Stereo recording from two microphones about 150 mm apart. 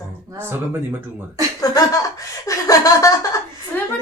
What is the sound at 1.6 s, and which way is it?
Speech, 25° left (ahead or behind).